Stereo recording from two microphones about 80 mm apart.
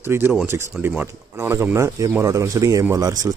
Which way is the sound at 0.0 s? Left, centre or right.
Right.